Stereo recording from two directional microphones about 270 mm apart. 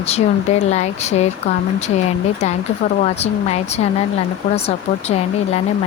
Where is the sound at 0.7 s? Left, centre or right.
Left.